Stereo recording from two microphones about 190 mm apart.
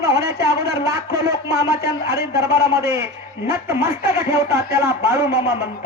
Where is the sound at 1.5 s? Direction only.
55° left (ahead or behind).